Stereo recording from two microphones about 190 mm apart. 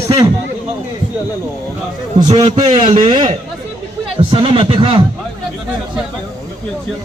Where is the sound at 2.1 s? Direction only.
25° right (ahead or behind).